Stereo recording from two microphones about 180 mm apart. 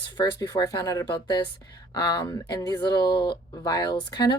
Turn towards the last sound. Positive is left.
turn(degrees=25)  # may be behind; listen again after turning